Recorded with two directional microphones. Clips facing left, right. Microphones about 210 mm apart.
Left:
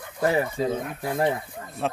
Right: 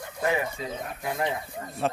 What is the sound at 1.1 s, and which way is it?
Speech, 55° left (ahead or behind).